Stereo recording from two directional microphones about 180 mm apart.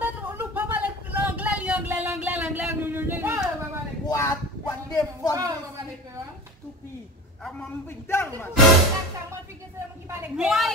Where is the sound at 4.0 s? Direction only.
20° left (ahead or behind).